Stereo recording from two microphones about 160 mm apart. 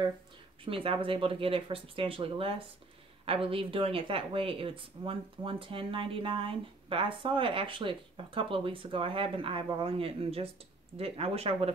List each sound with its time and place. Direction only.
0.7 s speech: 35° right (ahead or behind)